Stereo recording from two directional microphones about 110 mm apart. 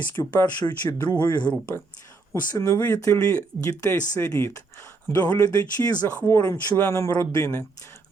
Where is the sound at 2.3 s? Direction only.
25° left (ahead or behind).